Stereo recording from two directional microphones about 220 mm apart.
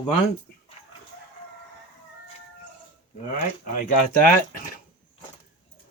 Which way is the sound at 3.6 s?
40° left (ahead or behind).